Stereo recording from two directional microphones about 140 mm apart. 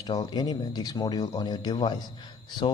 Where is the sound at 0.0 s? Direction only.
30° left (ahead or behind).